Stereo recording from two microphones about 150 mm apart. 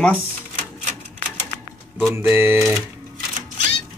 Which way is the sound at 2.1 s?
15° right (ahead or behind).